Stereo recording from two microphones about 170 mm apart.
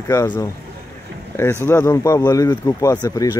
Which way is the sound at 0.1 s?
20° left (ahead or behind).